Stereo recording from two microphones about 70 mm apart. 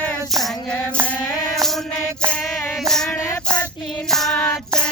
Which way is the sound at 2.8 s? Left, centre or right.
Centre.